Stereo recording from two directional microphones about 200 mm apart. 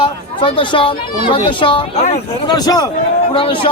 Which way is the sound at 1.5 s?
25° left (ahead or behind).